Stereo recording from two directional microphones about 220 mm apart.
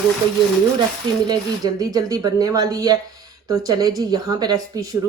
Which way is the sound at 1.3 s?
15° right (ahead or behind).